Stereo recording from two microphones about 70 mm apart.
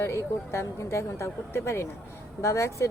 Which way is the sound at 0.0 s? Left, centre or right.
Left.